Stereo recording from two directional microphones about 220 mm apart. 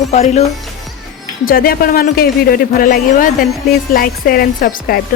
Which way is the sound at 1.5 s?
40° left (ahead or behind).